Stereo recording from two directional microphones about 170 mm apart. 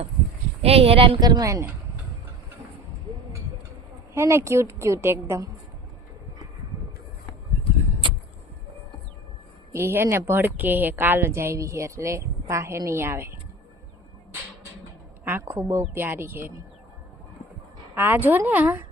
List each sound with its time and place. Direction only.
0.6 s speech: 35° right (ahead or behind)
1.2 s speech: 20° right (ahead or behind)
4.1 s a woman's voice: 15° right (ahead or behind)
9.7 s a woman's voice: 15° right (ahead or behind)
15.2 s a woman's voice: 10° right (ahead or behind)
17.9 s a woman's voice: 10° right (ahead or behind)